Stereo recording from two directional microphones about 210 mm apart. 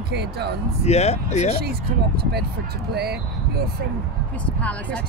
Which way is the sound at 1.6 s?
50° right (ahead or behind).